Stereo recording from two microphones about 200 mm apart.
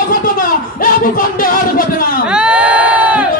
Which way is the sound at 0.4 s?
45° left (ahead or behind).